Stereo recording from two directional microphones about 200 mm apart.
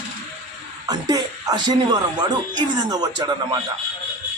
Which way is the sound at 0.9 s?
20° right (ahead or behind).